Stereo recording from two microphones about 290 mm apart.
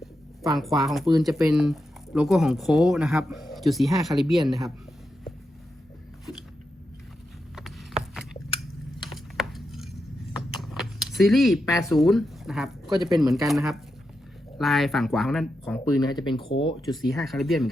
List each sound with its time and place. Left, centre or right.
0.5 s speech: centre
9.1 s a sound: centre
11.6 s speech: centre
11.9 s speech: centre
15.8 s speech: centre
17.0 s speech: centre